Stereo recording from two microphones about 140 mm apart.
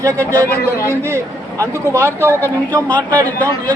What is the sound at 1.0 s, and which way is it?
A man's voice, 20° right (ahead or behind).